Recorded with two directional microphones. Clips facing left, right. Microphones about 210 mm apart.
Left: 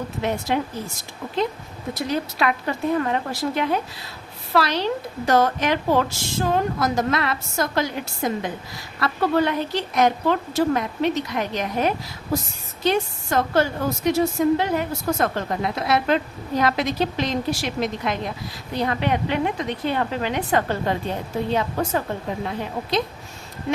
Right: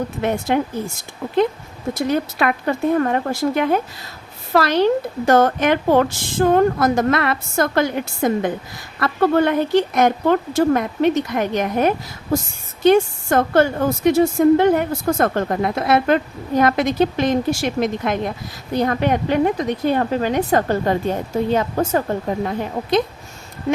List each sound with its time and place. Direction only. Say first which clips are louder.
0.2 s a woman's voice: right 4 dB; 55° right (ahead or behind)
1.9 s a woman's voice: right 5 dB; 50° right (ahead or behind)